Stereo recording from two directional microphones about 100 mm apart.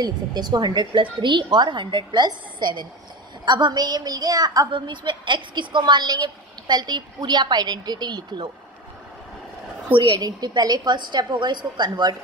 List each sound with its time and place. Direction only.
0.0 s a woman's voice: 45° right (ahead or behind)
4.7 s a woman's voice: 50° right (ahead or behind)
9.9 s a woman's voice: 15° right (ahead or behind)
10.2 s a woman's voice: 45° right (ahead or behind)